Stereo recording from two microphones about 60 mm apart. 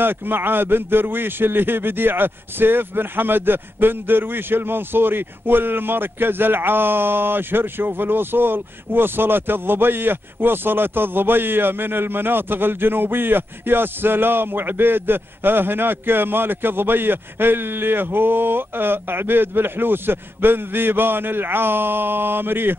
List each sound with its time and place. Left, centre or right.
0.0 s a man's voice: right